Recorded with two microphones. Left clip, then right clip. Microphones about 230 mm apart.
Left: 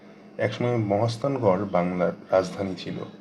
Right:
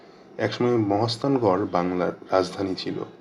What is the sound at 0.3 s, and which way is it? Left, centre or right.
Speech, right.